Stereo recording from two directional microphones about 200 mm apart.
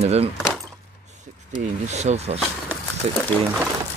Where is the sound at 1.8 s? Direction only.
35° right (ahead or behind).